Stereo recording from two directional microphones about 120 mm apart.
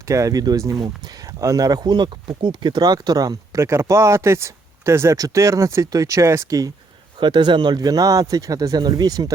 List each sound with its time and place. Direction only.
0.1 s speech: 25° right (ahead or behind)
7.2 s speech: 40° right (ahead or behind)